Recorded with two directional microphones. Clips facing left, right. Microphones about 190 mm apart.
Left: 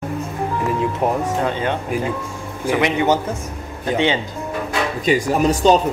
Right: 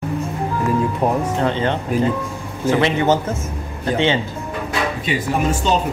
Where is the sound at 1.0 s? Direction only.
20° left (ahead or behind).